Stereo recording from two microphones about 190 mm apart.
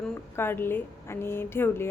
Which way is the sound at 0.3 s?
10° left (ahead or behind).